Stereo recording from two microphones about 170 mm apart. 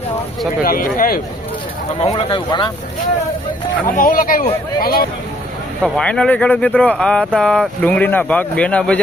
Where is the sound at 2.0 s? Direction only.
30° left (ahead or behind).